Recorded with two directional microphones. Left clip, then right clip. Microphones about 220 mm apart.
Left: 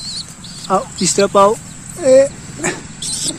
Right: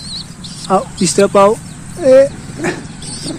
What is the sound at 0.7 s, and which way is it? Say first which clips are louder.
Speech: right 2 dB; centre (ahead or behind).